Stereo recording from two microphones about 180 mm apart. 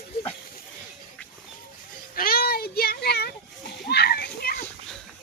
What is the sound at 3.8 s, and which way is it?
Children playing, 65° left (ahead or behind).